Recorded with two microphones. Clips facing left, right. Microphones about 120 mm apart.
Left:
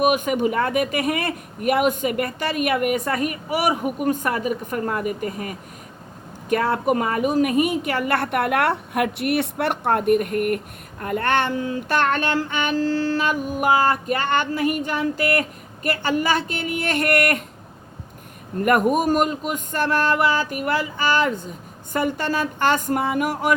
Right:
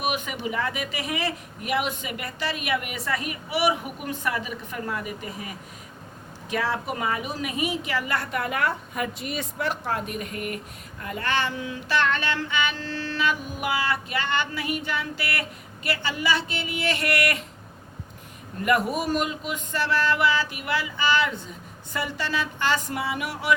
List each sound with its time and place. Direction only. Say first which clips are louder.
0.0 s music: left 10 dB; 45° left (ahead or behind)
6.5 s a woman's voice: left 8 dB; 50° left (ahead or behind)
11.0 s music: left 6 dB; 55° left (ahead or behind)
18.6 s music: left 6 dB; 50° left (ahead or behind)